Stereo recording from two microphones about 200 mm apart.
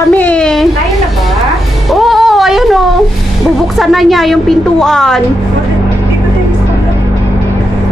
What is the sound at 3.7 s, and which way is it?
A woman's voice, centre (ahead or behind).